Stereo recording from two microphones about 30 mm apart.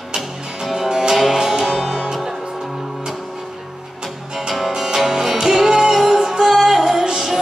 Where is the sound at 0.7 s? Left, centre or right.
Centre.